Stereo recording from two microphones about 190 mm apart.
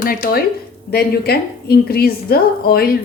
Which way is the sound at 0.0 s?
50° left (ahead or behind).